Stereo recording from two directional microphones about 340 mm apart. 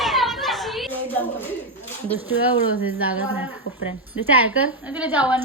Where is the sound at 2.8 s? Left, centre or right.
Centre.